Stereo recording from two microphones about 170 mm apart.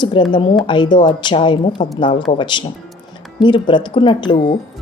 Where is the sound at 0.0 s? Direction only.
25° left (ahead or behind).